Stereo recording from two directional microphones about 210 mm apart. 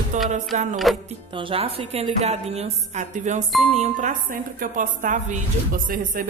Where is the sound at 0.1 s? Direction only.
35° right (ahead or behind).